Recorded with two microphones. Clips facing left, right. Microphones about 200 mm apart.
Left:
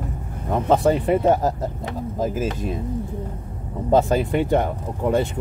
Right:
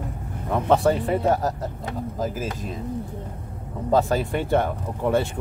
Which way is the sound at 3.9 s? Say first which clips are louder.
Left 3 dB; 20° left (ahead or behind).